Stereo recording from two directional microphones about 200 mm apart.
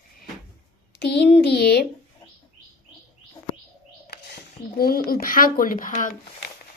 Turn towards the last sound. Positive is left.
turn(degrees=40)  # may be behind; listen again after turning